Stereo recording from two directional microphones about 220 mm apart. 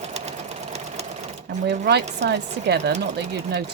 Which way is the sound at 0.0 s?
30° right (ahead or behind).